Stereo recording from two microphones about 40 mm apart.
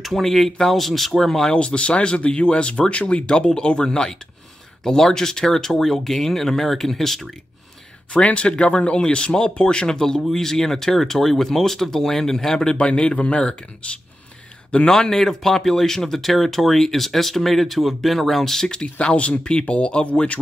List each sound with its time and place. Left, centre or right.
0.0 s speech: centre
1.5 s speech: left; by 7.2 s centre
8.1 s speech: left
14.9 s speech: centre
18.7 s speech: left